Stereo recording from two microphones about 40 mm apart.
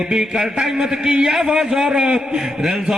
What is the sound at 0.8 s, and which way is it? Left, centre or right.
A man's voice, centre.